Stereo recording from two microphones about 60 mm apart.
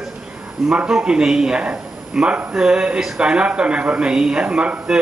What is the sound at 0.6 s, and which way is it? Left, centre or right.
Speech, centre.